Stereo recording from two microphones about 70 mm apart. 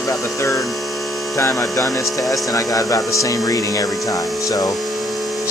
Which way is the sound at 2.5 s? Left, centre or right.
Left.